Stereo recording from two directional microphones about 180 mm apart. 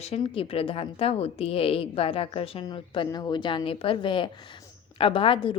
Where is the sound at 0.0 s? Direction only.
35° left (ahead or behind).